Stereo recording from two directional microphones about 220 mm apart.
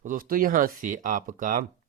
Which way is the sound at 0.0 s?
40° right (ahead or behind).